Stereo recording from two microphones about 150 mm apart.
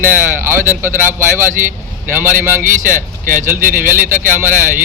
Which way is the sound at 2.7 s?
60° right (ahead or behind).